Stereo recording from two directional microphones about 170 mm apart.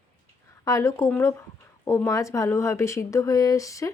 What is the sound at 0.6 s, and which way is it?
Speech, 20° left (ahead or behind).